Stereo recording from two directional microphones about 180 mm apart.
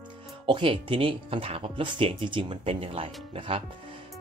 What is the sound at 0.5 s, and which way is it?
Speech, 30° right (ahead or behind).